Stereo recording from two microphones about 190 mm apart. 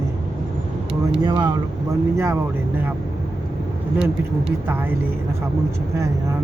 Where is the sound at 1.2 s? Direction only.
25° right (ahead or behind).